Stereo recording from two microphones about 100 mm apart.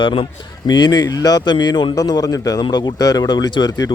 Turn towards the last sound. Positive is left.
turn(degrees=40)  # may be behind; listen again after turning